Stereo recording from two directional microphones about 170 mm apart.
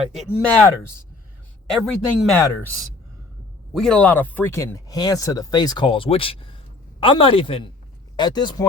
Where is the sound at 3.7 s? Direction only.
5° left (ahead or behind).